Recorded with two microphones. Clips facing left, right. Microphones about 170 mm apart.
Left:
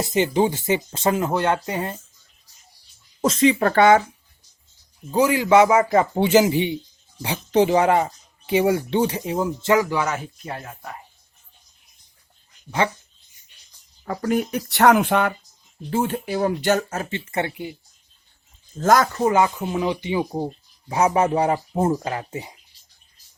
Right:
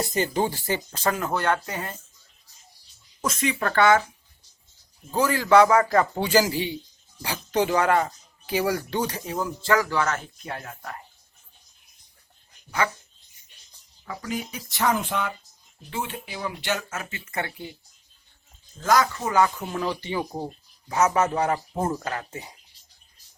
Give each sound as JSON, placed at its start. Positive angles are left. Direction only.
{"t": 0.0, "sound": "speech", "side_deg": 20}
{"t": 3.2, "sound": "speech", "side_deg": 30}
{"t": 5.1, "sound": "speech", "side_deg": 15}
{"t": 14.0, "sound": "speech", "side_deg": 50}
{"t": 15.9, "sound": "speech", "side_deg": 45}
{"t": 18.8, "sound": "speech", "side_deg": 45}
{"t": 19.3, "sound": "speech", "side_deg": 20}
{"t": 21.2, "sound": "speech", "side_deg": 30}